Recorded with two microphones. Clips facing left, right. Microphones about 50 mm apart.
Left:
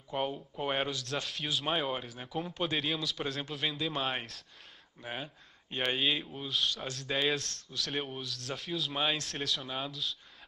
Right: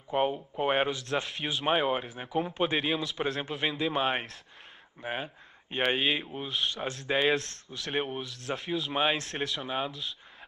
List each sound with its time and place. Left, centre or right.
0.1 s speech: right